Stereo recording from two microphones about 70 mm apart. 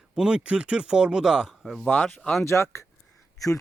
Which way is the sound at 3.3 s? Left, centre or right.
Left.